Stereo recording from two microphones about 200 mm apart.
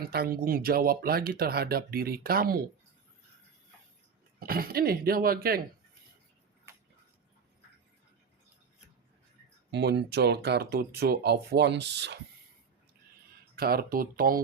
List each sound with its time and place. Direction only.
0.0 s speech: 50° right (ahead or behind)
4.4 s speech: 45° right (ahead or behind)
9.7 s speech: 60° right (ahead or behind)
13.6 s speech: 50° right (ahead or behind)